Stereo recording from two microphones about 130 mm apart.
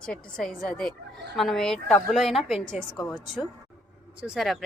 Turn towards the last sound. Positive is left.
turn(degrees=0)  # may be behind; listen again after turning